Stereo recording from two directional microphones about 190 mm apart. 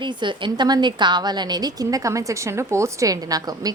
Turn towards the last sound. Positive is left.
turn(degrees=-20)  # may be behind; listen again after turning